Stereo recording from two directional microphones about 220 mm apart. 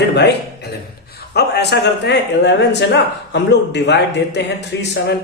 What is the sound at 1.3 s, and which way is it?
Speech, 45° left (ahead or behind).